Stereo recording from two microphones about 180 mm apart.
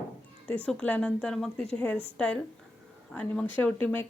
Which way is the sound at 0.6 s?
5° left (ahead or behind).